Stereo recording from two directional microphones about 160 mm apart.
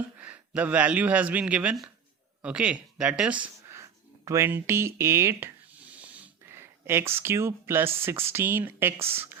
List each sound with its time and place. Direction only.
0.2 s speech: 10° right (ahead or behind)
4.3 s a sound: 15° right (ahead or behind)
7.2 s speech: 15° right (ahead or behind)